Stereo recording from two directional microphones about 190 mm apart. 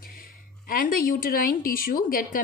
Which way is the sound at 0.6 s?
50° left (ahead or behind).